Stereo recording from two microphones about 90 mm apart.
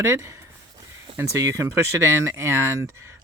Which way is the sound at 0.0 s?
30° right (ahead or behind).